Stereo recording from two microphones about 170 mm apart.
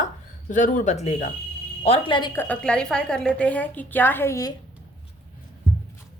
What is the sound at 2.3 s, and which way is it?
A woman's voice, 10° left (ahead or behind).